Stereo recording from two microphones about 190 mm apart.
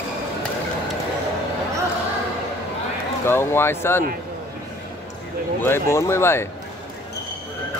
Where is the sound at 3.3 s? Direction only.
10° left (ahead or behind).